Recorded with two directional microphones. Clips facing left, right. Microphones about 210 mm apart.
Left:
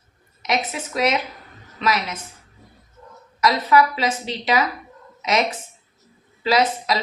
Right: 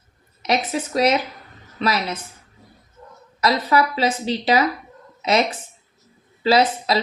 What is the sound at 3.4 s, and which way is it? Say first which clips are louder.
Speech: left 1 dB; 35° right (ahead or behind).